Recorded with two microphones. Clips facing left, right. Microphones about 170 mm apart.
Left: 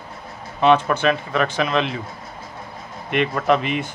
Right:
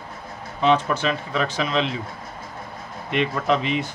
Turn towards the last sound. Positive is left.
turn(degrees=55)  # may be behind; listen again after turning